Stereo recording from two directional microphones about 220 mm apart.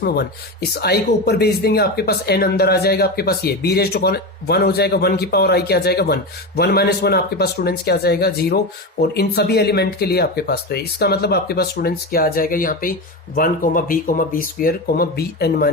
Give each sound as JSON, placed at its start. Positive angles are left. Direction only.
{"t": 0.0, "sound": "speech", "side_deg": 45}